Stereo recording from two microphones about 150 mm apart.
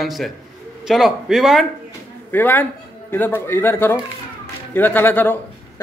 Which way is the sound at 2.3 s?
15° left (ahead or behind).